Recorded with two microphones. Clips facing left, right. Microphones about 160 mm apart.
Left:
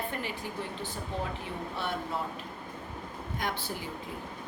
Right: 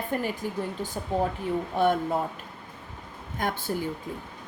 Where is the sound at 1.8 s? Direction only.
50° right (ahead or behind).